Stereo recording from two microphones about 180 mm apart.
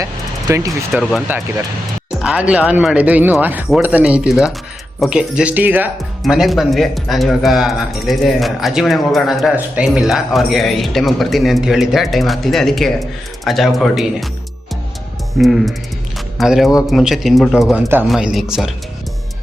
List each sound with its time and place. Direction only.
0.0 s music: 20° right (ahead or behind)
0.9 s speech: 5° right (ahead or behind)
15.4 s speech: centre (ahead or behind)